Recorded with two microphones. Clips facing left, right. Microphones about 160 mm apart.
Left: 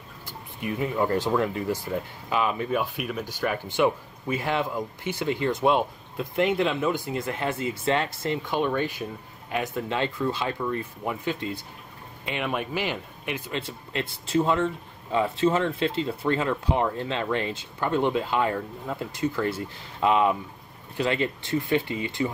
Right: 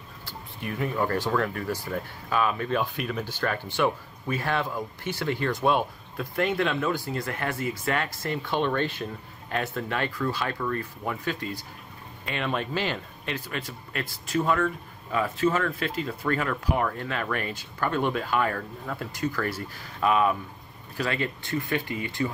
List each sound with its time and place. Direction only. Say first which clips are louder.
0.2 s speech: left 3 dB; 20° left (ahead or behind)